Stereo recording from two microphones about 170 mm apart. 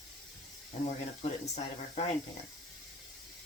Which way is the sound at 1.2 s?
35° left (ahead or behind).